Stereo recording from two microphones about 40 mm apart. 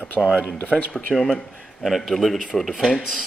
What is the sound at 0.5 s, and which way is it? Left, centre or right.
Speech, left.